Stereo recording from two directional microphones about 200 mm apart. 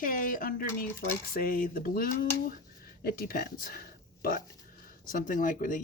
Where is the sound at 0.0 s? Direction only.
45° left (ahead or behind).